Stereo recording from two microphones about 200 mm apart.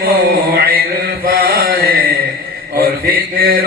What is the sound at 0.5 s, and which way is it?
Mantra, 45° right (ahead or behind).